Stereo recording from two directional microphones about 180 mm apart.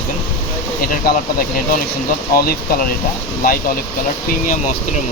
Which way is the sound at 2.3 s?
55° left (ahead or behind).